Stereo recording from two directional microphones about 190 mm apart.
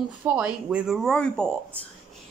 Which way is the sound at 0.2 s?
5° right (ahead or behind).